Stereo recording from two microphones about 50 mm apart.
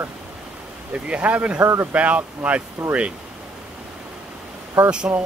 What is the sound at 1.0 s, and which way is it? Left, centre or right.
Speech, right.